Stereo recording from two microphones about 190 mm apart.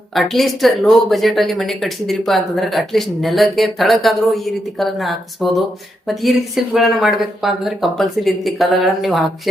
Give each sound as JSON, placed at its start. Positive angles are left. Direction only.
{"t": 0.1, "sound": "speech", "side_deg": 0}